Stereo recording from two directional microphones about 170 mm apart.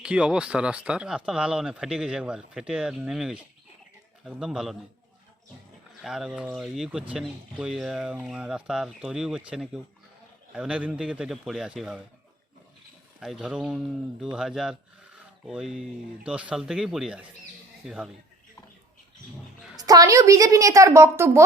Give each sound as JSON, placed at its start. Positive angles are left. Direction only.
{"t": 0.0, "sound": "speech", "side_deg": -5}
{"t": 6.0, "sound": "speech", "side_deg": 0}
{"t": 13.1, "sound": "speech", "side_deg": -5}
{"t": 19.7, "sound": "a woman's voice", "side_deg": -20}